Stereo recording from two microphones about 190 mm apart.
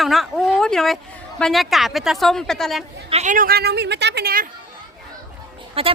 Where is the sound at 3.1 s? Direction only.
40° right (ahead or behind).